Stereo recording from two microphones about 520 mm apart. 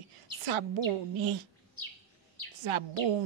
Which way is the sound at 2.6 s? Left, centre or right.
Right.